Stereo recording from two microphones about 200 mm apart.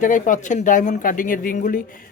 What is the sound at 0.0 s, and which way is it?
Speech, 40° left (ahead or behind).